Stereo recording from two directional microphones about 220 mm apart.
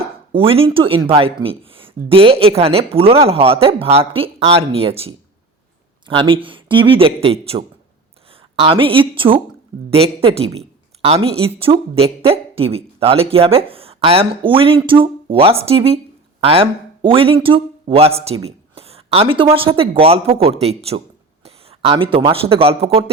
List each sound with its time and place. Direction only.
0.3 s a man's voice: 25° right (ahead or behind)